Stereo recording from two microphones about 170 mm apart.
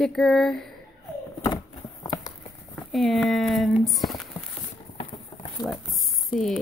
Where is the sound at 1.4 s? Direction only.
20° left (ahead or behind).